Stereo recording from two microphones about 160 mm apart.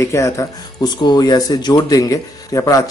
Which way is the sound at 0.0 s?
20° left (ahead or behind).